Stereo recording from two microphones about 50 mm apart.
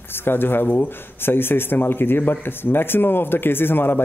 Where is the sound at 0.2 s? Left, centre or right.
Left.